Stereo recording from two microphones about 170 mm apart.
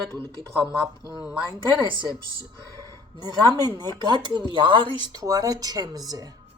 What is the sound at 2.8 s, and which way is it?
A woman's voice, 25° right (ahead or behind).